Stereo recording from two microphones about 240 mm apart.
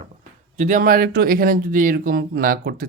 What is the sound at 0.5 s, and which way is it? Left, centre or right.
Speech, right.